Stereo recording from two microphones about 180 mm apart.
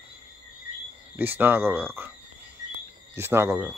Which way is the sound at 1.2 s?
10° right (ahead or behind).